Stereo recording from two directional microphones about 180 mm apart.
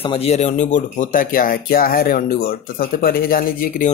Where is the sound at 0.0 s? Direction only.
30° left (ahead or behind).